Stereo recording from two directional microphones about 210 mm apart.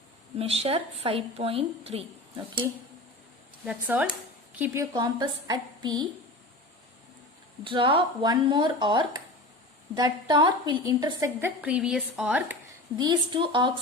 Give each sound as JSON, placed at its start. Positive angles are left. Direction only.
{"t": 0.3, "sound": "a woman's voice", "side_deg": -30}
{"t": 3.7, "sound": "a woman's voice", "side_deg": -5}
{"t": 7.6, "sound": "a woman's voice", "side_deg": -25}
{"t": 13.0, "sound": "a woman's voice", "side_deg": -20}